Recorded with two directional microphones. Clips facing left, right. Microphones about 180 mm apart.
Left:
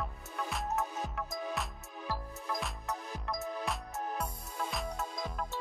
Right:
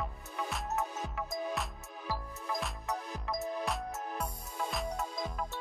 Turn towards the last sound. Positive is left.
turn(degrees=0)  # may be behind; listen again after turning